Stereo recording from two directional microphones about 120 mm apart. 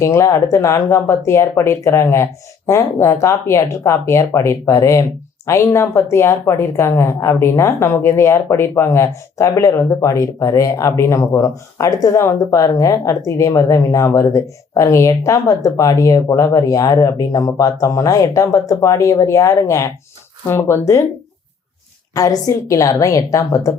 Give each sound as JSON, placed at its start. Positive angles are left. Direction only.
{"t": 0.0, "sound": "a woman's voice", "side_deg": 25}
{"t": 22.1, "sound": "a woman's voice", "side_deg": 30}